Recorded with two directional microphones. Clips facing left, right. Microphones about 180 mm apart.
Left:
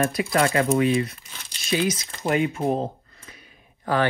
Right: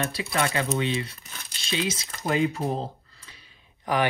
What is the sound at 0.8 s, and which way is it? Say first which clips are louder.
Speech: left 7 dB; 30° right (ahead or behind).